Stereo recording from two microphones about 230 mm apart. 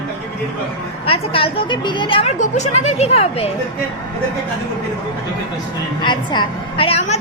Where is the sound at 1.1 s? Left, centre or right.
Left.